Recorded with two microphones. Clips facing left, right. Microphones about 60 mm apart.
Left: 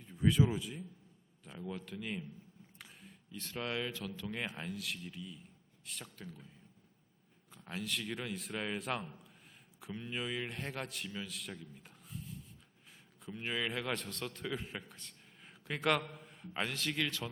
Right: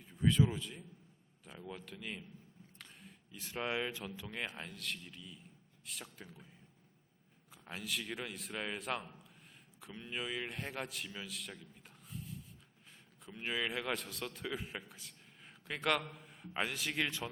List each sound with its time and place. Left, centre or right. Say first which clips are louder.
0.0 s a man's voice: left 1 dB; centre
3.3 s speech: right 1 dB; centre
4.3 s a man's voice: left 3 dB; centre
6.1 s speech: left 3 dB; centre
7.5 s a man's voice: left 2 dB; centre